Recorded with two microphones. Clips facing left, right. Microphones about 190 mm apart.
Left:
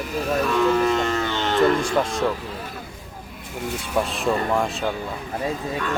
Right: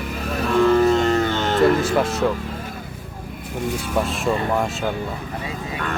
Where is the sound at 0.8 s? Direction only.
40° right (ahead or behind).